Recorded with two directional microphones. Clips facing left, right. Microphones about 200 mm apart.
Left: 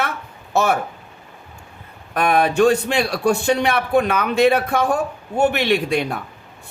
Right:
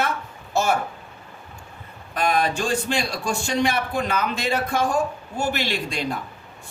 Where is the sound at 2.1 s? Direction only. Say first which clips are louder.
Left 6 dB; 60° left (ahead or behind).